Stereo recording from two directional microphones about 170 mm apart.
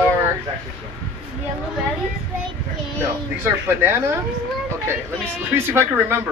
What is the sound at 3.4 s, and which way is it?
Speech, 10° right (ahead or behind).